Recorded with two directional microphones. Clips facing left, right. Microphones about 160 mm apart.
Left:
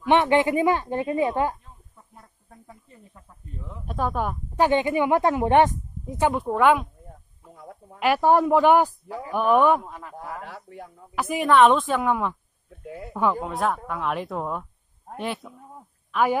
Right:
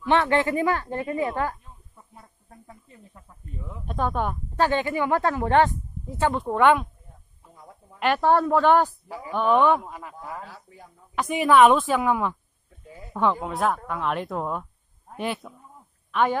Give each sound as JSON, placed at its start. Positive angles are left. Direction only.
{"t": 0.0, "sound": "speech", "side_deg": 20}
{"t": 3.2, "sound": "speech", "side_deg": -5}
{"t": 4.6, "sound": "speech", "side_deg": 20}
{"t": 7.5, "sound": "a sound", "side_deg": 65}
{"t": 8.0, "sound": "speech", "side_deg": 10}
{"t": 9.8, "sound": "a man's voice", "side_deg": -5}
{"t": 10.1, "sound": "speech", "side_deg": 70}
{"t": 11.1, "sound": "speech", "side_deg": 5}
{"t": 11.4, "sound": "speech", "side_deg": -5}
{"t": 12.6, "sound": "a sound", "side_deg": 70}
{"t": 13.1, "sound": "speech", "side_deg": 5}